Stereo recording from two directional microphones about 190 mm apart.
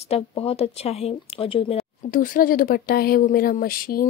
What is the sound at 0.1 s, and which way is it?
Speech, 30° left (ahead or behind).